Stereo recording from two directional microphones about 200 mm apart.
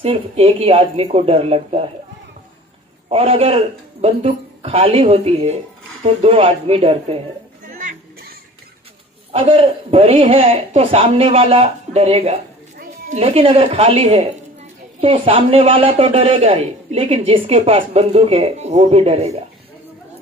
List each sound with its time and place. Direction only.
0.0 s a man's voice: 30° right (ahead or behind)
3.1 s a man's voice: 30° right (ahead or behind)
7.7 s a sound: 45° right (ahead or behind)
9.3 s a man's voice: 25° right (ahead or behind)